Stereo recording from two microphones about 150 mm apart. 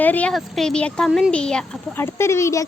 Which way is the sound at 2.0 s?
15° left (ahead or behind).